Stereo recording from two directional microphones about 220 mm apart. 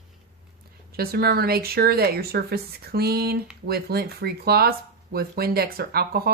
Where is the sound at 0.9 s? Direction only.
45° right (ahead or behind).